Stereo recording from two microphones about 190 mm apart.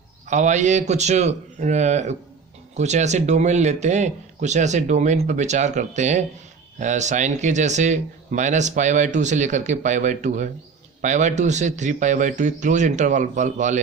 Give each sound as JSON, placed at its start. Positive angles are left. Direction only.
{"t": 0.3, "sound": "speech", "side_deg": -40}